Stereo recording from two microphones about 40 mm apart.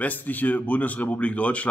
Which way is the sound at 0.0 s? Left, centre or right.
Left.